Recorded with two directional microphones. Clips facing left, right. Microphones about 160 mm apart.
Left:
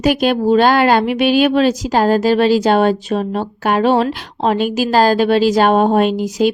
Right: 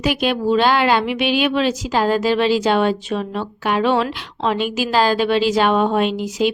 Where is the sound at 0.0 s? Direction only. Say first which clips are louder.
Left 5 dB; 45° left (ahead or behind).